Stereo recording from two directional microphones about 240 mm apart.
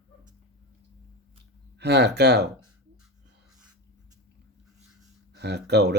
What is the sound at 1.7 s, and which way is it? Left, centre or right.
Speech, right.